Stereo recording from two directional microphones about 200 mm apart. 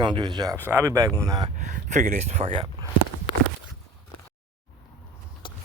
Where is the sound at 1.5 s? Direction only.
40° right (ahead or behind).